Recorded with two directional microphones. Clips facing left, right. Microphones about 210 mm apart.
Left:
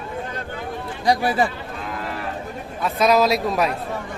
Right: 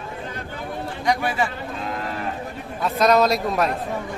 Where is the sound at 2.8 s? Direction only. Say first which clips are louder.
Even; centre (ahead or behind).